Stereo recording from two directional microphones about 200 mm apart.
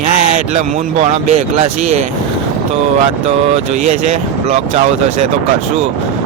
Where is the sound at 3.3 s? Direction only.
30° right (ahead or behind).